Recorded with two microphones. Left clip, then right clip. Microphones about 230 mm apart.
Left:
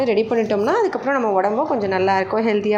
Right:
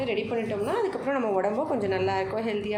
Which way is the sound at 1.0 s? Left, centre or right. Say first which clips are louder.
Left 8 dB; centre.